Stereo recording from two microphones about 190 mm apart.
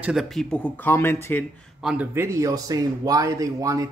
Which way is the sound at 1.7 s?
5° right (ahead or behind).